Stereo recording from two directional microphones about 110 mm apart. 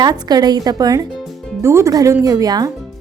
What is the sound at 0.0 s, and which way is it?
A woman's voice, 35° right (ahead or behind).